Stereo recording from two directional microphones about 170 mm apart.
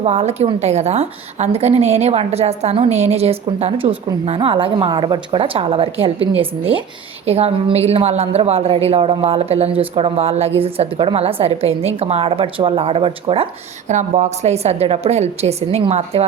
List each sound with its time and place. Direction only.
0.0 s a woman's voice: 40° right (ahead or behind)